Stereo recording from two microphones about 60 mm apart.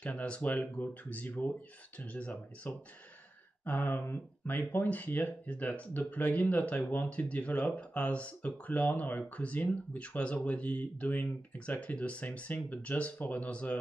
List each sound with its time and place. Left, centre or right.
0.0 s speech: left
3.6 s speech: left